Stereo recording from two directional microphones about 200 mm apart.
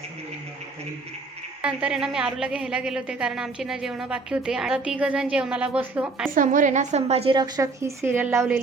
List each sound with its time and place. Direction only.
1.6 s a woman's voice: 5° right (ahead or behind)
6.3 s a woman's voice: 40° right (ahead or behind); by 8.5 s 10° right (ahead or behind)